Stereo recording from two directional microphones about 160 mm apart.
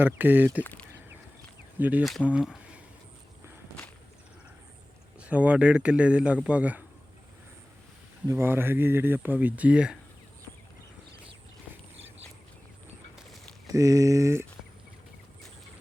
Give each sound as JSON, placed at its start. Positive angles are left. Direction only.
{"t": 0.0, "sound": "speech", "side_deg": -10}
{"t": 0.6, "sound": "speech", "side_deg": 10}
{"t": 1.8, "sound": "speech", "side_deg": -10}
{"t": 5.2, "sound": "speech", "side_deg": -10}
{"t": 8.3, "sound": "speech", "side_deg": -15}
{"t": 13.1, "sound": "a sound", "side_deg": 0}
{"t": 13.7, "sound": "speech", "side_deg": -20}